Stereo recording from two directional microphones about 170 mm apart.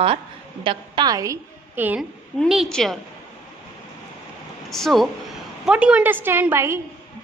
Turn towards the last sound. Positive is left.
turn(degrees=-15)  # may be behind; listen again after turning